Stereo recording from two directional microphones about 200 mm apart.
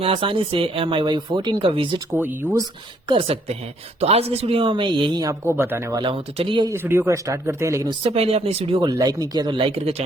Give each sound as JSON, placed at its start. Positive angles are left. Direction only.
{"t": 0.0, "sound": "speech", "side_deg": -25}
{"t": 2.1, "sound": "speech", "side_deg": -10}
{"t": 3.1, "sound": "speech", "side_deg": -25}
{"t": 6.7, "sound": "speech", "side_deg": -10}